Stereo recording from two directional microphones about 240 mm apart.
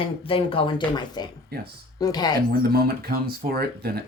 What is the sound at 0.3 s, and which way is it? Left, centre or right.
Speech, left.